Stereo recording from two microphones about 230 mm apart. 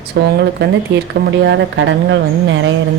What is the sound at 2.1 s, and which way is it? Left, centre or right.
Speech, right.